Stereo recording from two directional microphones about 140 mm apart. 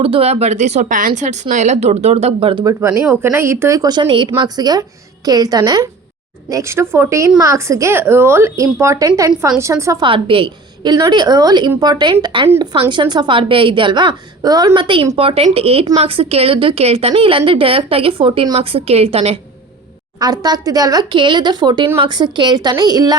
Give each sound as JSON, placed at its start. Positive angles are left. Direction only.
{"t": 0.0, "sound": "a woman's voice", "side_deg": -45}
{"t": 2.6, "sound": "speech", "side_deg": -20}
{"t": 10.0, "sound": "a woman's voice", "side_deg": -40}
{"t": 20.1, "sound": "a woman's voice", "side_deg": -30}